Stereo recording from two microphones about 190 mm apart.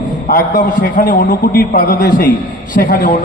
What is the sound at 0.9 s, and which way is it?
A man's voice, 45° left (ahead or behind).